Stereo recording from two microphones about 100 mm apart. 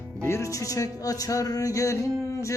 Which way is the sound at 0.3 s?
30° left (ahead or behind).